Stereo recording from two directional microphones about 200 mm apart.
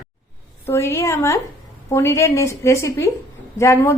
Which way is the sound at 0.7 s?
15° left (ahead or behind).